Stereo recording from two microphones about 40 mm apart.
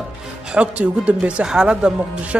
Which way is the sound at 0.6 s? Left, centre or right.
Right.